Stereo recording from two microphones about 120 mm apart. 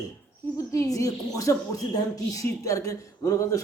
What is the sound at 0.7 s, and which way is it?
A man's voice, 25° left (ahead or behind).